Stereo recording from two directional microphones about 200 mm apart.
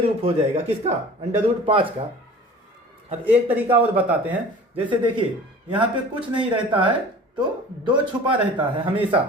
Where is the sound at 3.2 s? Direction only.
10° right (ahead or behind).